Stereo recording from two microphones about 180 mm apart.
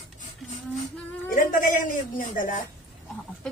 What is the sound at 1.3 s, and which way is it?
Speech, 50° left (ahead or behind).